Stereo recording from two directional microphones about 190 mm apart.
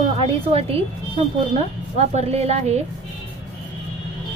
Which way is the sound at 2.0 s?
35° right (ahead or behind).